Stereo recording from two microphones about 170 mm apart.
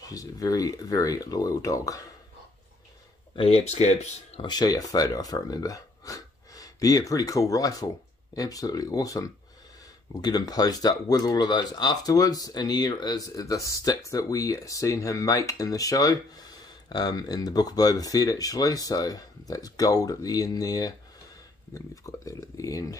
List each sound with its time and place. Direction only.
0.0 s speech: 20° left (ahead or behind)
3.3 s speech: 35° left (ahead or behind)
4.5 s speech: 25° left (ahead or behind)